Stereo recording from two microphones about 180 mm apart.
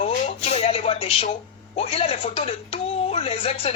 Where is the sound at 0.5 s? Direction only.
35° left (ahead or behind).